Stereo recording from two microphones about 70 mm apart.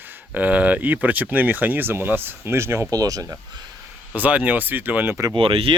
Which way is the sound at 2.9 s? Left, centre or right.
Right.